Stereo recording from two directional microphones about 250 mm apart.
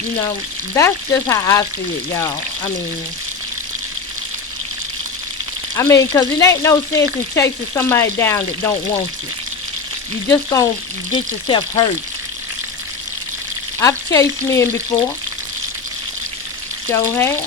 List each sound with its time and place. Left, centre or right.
0.8 s speech: centre
5.7 s speech: centre
10.2 s speech: centre
13.7 s speech: centre
16.9 s speech: centre